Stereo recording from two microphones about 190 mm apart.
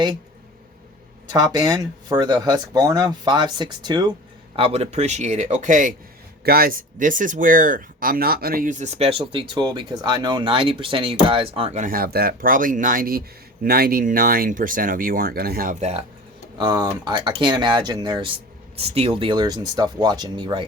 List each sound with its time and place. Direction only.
1.5 s a man's voice: 20° right (ahead or behind); by 16.0 s 35° right (ahead or behind)
16.6 s speech: 20° right (ahead or behind)